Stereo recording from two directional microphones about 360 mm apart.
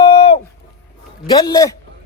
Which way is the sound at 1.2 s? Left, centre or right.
Centre.